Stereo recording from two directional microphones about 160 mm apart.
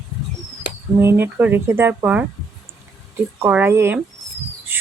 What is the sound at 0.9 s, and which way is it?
Speech, 15° right (ahead or behind).